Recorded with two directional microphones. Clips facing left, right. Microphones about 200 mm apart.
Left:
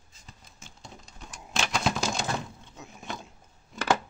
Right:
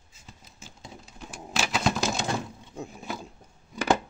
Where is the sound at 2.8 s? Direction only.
30° right (ahead or behind).